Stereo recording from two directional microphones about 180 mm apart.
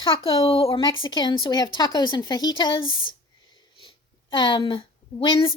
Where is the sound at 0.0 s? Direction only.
30° left (ahead or behind).